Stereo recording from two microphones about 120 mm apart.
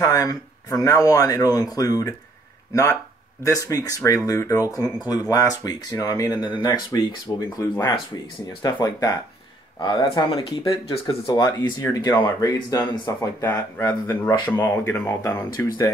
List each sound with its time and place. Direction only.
0.0 s speech: 30° left (ahead or behind)
8.7 s speech: 30° left (ahead or behind)
11.1 s speech: 40° left (ahead or behind)